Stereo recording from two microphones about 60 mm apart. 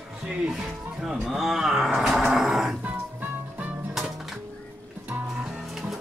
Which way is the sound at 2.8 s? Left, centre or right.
Right.